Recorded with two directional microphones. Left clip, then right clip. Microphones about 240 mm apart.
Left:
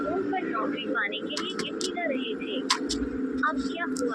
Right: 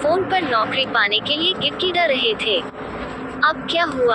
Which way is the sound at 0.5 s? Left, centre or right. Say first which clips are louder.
Right 11 dB; right.